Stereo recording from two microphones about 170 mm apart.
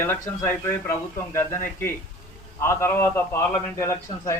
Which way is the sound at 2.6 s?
15° left (ahead or behind).